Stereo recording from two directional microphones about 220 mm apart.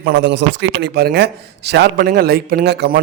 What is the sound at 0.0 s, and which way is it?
A man's voice, 50° right (ahead or behind).